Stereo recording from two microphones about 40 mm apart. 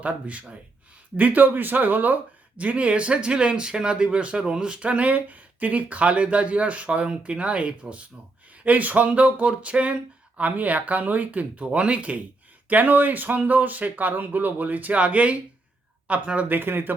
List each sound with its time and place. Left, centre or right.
0.0 s speech: right
12.6 s speech: right
16.5 s speech: right